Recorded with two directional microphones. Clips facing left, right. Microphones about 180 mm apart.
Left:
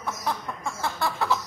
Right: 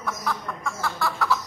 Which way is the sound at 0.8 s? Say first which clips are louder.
Even; 20° left (ahead or behind).